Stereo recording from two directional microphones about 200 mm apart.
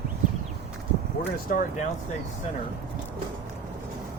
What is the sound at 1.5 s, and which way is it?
Speech, 45° left (ahead or behind).